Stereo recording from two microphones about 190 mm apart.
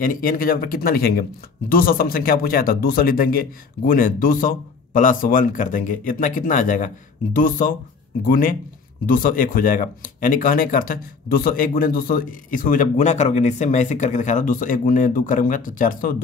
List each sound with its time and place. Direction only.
0.0 s speech: 45° left (ahead or behind)